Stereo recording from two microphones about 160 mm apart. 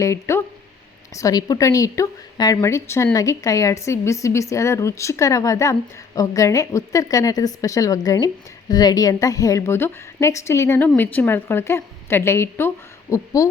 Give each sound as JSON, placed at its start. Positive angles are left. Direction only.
{"t": 0.0, "sound": "a woman's voice", "side_deg": 15}